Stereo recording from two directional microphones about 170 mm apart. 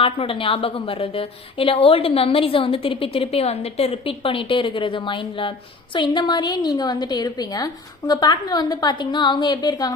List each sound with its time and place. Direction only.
0.0 s a woman's voice: 35° left (ahead or behind)